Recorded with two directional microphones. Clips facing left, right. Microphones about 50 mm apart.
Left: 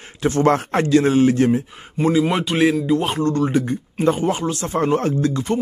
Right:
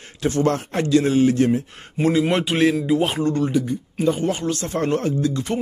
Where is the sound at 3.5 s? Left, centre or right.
Left.